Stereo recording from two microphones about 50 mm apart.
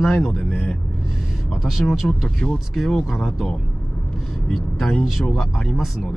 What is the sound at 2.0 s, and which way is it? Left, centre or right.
Speech, centre.